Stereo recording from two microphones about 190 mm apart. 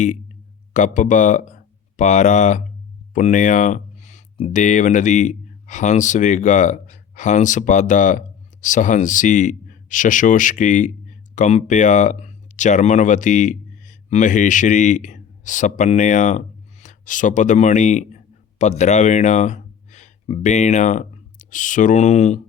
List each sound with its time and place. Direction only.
0.7 s speech: 40° left (ahead or behind)